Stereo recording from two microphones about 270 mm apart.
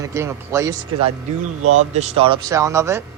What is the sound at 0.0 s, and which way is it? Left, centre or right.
Speech, centre.